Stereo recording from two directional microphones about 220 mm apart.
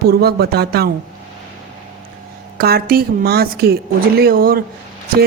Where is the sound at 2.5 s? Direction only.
45° right (ahead or behind).